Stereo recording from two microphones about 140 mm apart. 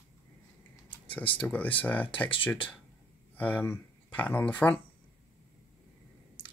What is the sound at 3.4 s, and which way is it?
Speech, 10° left (ahead or behind).